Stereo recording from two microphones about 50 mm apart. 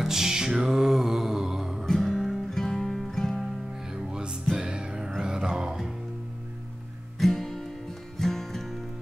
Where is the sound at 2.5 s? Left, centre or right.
Centre.